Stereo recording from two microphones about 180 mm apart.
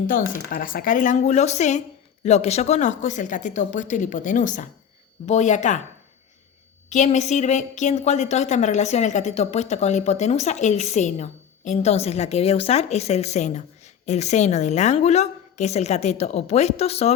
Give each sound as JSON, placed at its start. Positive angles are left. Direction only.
{"t": 0.5, "sound": "a woman's voice", "side_deg": 50}
{"t": 6.9, "sound": "a woman's voice", "side_deg": 40}